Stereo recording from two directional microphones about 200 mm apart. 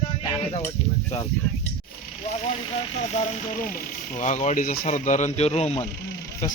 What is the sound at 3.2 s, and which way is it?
Speech, 40° left (ahead or behind).